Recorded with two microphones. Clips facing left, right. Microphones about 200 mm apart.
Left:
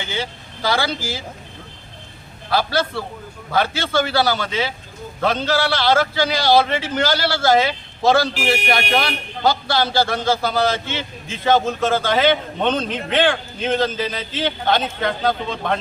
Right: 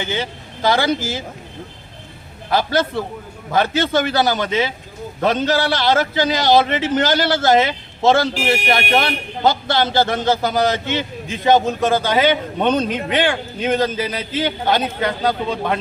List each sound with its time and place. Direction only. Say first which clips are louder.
0.0 s a man's voice: right 3 dB; 20° right (ahead or behind)
2.5 s a man's voice: right 2 dB; 20° right (ahead or behind)